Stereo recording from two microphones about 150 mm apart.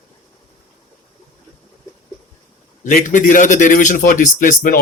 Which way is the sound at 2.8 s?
55° left (ahead or behind).